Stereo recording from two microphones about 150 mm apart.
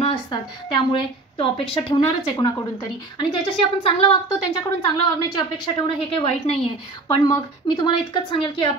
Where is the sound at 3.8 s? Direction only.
40° left (ahead or behind).